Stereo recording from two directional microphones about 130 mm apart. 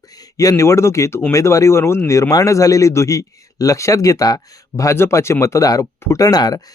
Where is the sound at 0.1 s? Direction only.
30° left (ahead or behind).